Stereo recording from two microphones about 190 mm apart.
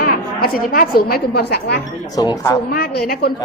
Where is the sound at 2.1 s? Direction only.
20° left (ahead or behind).